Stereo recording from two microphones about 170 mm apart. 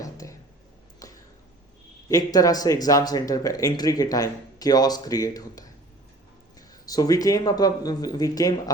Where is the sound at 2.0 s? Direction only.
20° left (ahead or behind).